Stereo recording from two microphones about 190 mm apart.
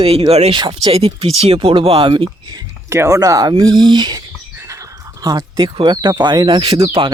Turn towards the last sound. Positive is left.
turn(degrees=-25)  # may be behind; listen again after turning